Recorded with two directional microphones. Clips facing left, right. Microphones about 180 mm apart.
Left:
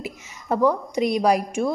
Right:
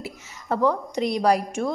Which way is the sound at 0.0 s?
15° left (ahead or behind).